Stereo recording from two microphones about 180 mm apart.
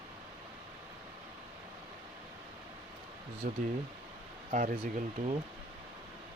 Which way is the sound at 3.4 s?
50° right (ahead or behind).